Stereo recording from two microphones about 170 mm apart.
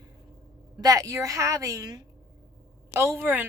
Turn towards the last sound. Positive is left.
turn(degrees=-10)  # may be behind; listen again after turning